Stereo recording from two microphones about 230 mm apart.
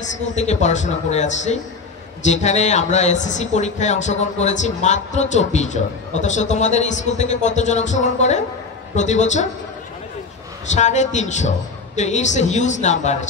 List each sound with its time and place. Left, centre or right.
0.0 s speech: left
10.7 s speech: left